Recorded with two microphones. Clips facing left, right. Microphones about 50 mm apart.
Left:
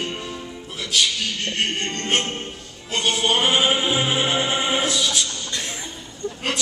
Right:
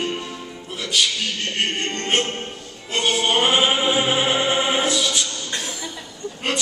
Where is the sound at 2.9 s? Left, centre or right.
Centre.